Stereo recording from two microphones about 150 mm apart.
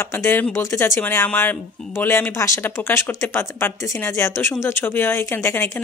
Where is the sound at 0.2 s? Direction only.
15° left (ahead or behind).